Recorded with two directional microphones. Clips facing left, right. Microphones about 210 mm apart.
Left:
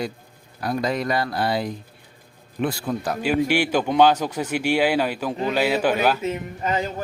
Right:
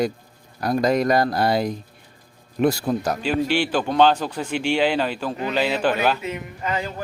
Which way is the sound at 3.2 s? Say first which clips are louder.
Left 1 dB; 10° left (ahead or behind).